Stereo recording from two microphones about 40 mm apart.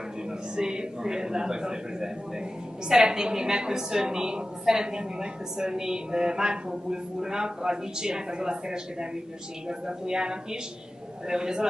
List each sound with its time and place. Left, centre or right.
0.3 s a man's voice: centre